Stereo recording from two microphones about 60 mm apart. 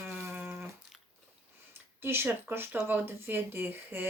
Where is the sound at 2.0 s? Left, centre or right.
Right.